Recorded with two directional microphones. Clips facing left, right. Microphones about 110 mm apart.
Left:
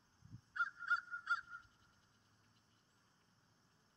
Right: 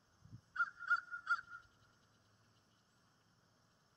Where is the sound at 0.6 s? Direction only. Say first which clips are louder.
Right 2 dB; 35° right (ahead or behind).